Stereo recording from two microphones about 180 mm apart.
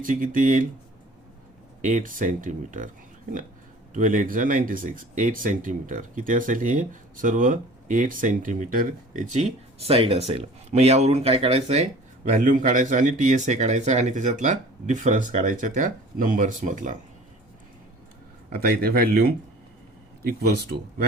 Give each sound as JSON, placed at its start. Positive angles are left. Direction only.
{"t": 0.0, "sound": "speech", "side_deg": -50}
{"t": 1.8, "sound": "speech", "side_deg": -45}
{"t": 3.9, "sound": "speech", "side_deg": -45}
{"t": 18.5, "sound": "speech", "side_deg": -60}